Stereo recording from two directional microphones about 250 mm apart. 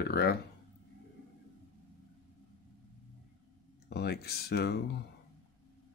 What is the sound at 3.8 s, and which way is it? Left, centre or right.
Speech, left.